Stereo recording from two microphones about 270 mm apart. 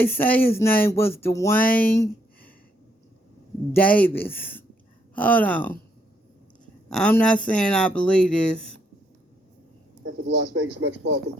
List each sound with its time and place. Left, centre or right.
0.0 s speech: centre
3.7 s speech: centre
6.8 s speech: centre
10.2 s speech: right